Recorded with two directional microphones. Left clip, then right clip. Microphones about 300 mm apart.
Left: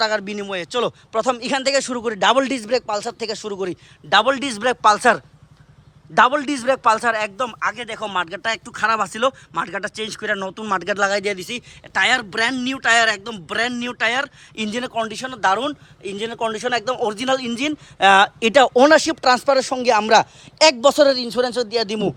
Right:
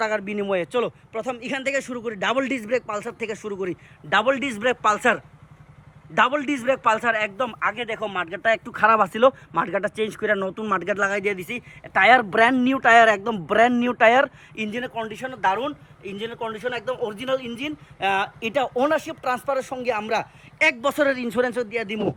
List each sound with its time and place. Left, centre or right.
0.0 s a man's voice: centre
1.1 s a man's voice: centre
8.4 s speech: centre
14.5 s a man's voice: centre